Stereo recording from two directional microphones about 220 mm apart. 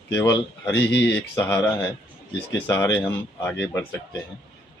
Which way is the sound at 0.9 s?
50° left (ahead or behind).